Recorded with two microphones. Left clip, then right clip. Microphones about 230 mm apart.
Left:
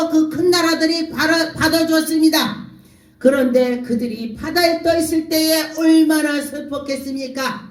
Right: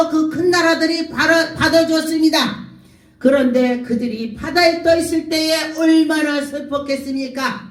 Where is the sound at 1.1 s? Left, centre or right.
Left.